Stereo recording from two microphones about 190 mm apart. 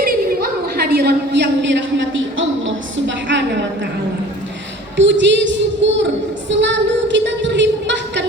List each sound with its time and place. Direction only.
0.0 s a sound: 55° right (ahead or behind)
2.1 s a woman's voice: 90° right
4.9 s a woman's voice: 75° right (ahead or behind)